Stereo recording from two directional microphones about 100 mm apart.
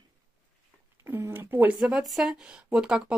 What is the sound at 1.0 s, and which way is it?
Speech, 25° right (ahead or behind).